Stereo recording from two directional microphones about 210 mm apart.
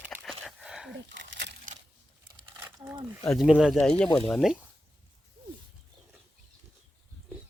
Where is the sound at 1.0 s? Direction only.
60° right (ahead or behind).